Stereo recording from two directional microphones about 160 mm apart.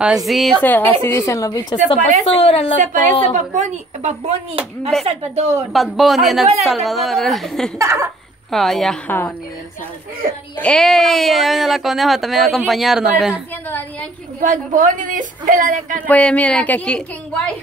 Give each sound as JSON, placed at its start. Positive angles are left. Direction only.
{"t": 0.0, "sound": "a woman's voice", "side_deg": 0}
{"t": 2.8, "sound": "a woman's voice", "side_deg": -55}
{"t": 5.7, "sound": "speech", "side_deg": 0}
{"t": 7.8, "sound": "speech", "side_deg": -15}
{"t": 8.5, "sound": "speech", "side_deg": 0}
{"t": 10.6, "sound": "speech", "side_deg": 5}
{"t": 13.3, "sound": "a woman's voice", "side_deg": 10}
{"t": 14.4, "sound": "a woman's voice", "side_deg": -55}
{"t": 16.1, "sound": "speech", "side_deg": 5}